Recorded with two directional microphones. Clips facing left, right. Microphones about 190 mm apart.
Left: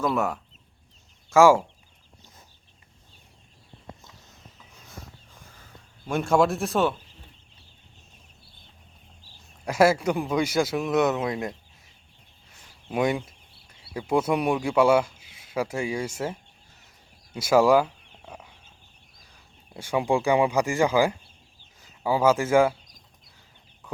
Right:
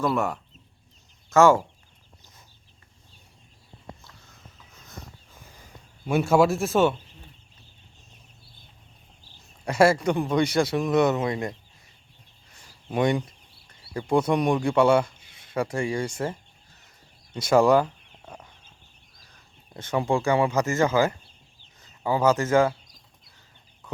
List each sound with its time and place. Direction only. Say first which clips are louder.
0.0 s speech: even; centre (ahead or behind)
4.0 s a sound: left 1 dB; 20° left (ahead or behind)
6.1 s speech: right 2 dB; 5° right (ahead or behind)
9.6 s speech: right 1 dB; 5° left (ahead or behind)
12.5 s speech: right 1 dB; 5° left (ahead or behind)
17.3 s chicken: even; 5° left (ahead or behind)
19.7 s speech: left 1 dB; 10° left (ahead or behind)